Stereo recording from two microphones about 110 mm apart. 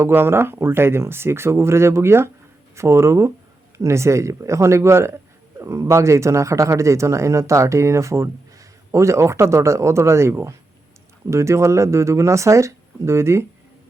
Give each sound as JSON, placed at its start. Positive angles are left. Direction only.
{"t": 0.0, "sound": "speech", "side_deg": -20}